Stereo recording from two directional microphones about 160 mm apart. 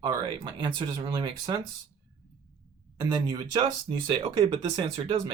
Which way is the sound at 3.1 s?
25° right (ahead or behind).